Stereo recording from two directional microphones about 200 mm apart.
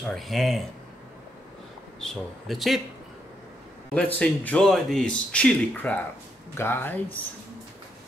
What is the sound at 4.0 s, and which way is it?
A man's voice, 5° left (ahead or behind).